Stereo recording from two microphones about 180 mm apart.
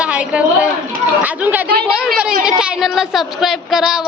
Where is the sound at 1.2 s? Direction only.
10° right (ahead or behind).